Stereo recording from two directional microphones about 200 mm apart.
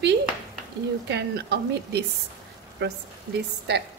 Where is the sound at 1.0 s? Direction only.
55° right (ahead or behind).